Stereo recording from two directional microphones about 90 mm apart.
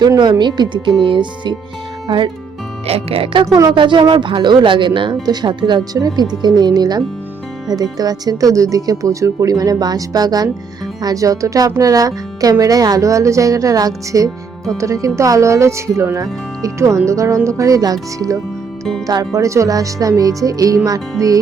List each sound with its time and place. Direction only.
0.2 s speech: 55° right (ahead or behind)
2.9 s speech: 90° right
3.4 s speech: 35° right (ahead or behind)
3.7 s speech: 60° right (ahead or behind); by 21.3 s 40° right (ahead or behind)